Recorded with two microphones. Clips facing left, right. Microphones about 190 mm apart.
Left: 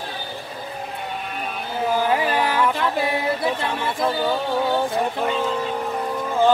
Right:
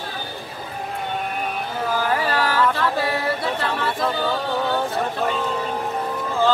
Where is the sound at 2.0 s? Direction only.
15° left (ahead or behind).